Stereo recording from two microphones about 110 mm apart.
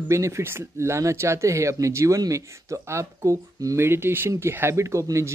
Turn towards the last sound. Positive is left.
turn(degrees=-25)  # may be behind; listen again after turning